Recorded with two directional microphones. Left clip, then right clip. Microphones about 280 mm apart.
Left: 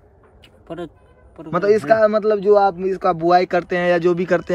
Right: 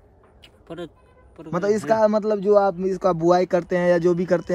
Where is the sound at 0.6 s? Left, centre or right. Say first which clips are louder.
Left 4 dB; centre.